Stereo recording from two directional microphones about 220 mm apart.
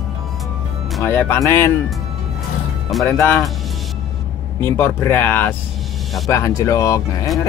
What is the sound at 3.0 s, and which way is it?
Speech, 10° left (ahead or behind).